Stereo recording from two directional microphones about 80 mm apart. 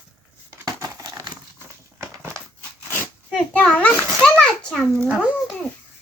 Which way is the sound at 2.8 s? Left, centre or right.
Left.